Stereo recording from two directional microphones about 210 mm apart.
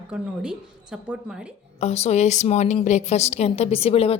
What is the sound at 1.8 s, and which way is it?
A woman's voice, 30° left (ahead or behind).